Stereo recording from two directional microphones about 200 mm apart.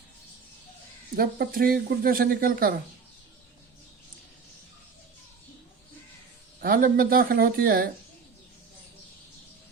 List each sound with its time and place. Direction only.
1.1 s speech: 50° right (ahead or behind)
6.6 s speech: 45° right (ahead or behind)